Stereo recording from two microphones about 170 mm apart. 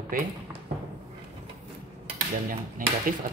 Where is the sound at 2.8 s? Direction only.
55° right (ahead or behind).